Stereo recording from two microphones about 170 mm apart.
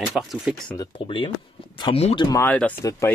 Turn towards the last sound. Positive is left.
turn(degrees=15)  # may be behind; listen again after turning